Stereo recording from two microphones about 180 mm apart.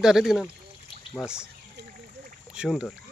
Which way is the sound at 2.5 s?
5° right (ahead or behind).